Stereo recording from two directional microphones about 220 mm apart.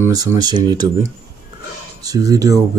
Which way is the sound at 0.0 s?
15° right (ahead or behind).